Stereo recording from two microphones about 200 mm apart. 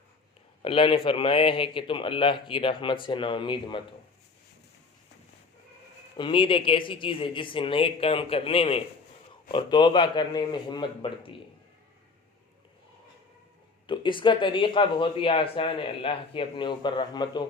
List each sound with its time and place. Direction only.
0.6 s speech: 25° left (ahead or behind)
6.1 s speech: 25° left (ahead or behind)
13.8 s speech: 25° left (ahead or behind)